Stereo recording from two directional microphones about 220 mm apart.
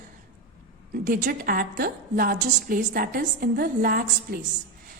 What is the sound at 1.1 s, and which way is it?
A woman's voice, 40° right (ahead or behind).